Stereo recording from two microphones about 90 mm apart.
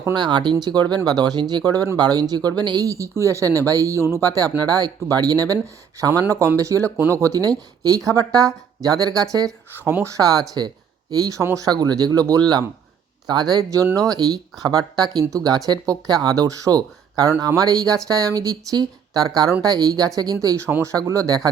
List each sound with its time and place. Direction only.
0.1 s speech: 55° right (ahead or behind)